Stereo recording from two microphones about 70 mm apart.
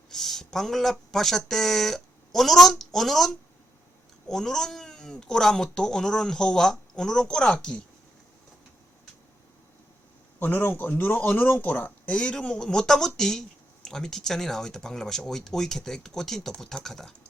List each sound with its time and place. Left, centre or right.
0.1 s speech: centre
10.4 s speech: left; by 17.2 s centre